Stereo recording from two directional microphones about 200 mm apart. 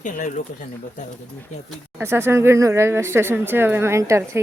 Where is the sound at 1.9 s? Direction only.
10° right (ahead or behind).